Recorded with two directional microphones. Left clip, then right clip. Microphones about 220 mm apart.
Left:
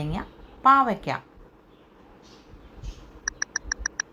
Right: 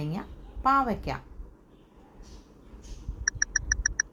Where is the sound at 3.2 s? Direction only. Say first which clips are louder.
Right 2 dB; 15° right (ahead or behind).